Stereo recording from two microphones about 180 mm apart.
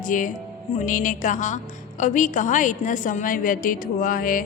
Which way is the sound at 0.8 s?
45° left (ahead or behind).